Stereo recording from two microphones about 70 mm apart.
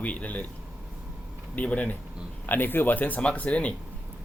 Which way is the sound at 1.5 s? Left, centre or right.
Left.